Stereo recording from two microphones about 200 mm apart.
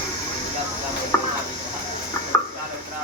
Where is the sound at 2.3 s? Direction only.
15° left (ahead or behind).